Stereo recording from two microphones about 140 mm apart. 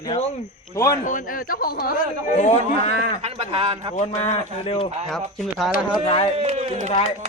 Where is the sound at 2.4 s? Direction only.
50° left (ahead or behind).